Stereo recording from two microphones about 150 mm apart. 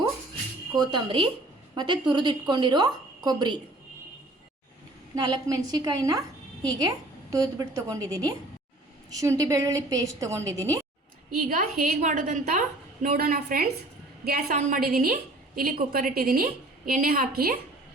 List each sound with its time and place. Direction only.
0.8 s a woman's voice: 30° right (ahead or behind)
5.1 s a woman's voice: 25° right (ahead or behind)
11.3 s a woman's voice: 65° right (ahead or behind)
14.3 s a woman's voice: 90° right